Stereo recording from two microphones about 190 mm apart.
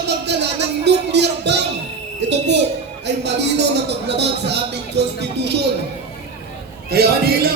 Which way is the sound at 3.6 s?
65° right (ahead or behind).